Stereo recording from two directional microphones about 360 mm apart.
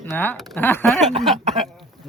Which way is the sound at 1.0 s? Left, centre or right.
Centre.